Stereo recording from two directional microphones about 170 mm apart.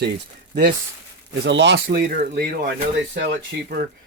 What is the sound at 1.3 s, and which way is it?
Speech, 90° right.